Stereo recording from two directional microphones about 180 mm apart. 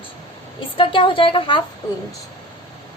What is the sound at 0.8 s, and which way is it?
Speech, 30° left (ahead or behind).